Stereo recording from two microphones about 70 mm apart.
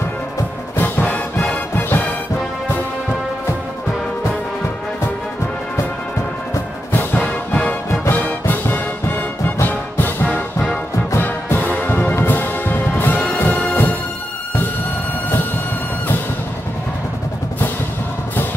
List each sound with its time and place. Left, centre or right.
0.7 s music: left
6.9 s music: left
7.2 s music: centre
11.1 s music: left